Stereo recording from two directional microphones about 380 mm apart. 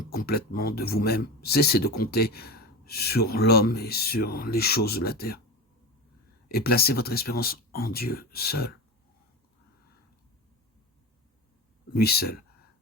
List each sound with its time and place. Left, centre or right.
0.0 s speech: left
6.5 s speech: left
11.9 s speech: left